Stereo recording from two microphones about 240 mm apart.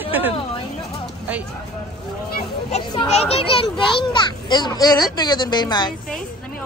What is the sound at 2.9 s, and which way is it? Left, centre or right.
A child's voice, left.